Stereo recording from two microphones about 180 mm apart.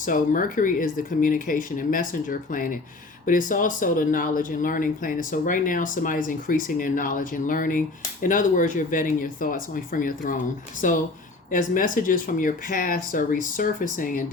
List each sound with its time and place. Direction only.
0.0 s speech: 50° left (ahead or behind)